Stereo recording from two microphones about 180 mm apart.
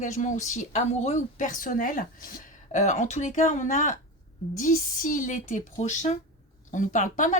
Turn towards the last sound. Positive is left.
turn(degrees=45)  # may be behind; listen again after turning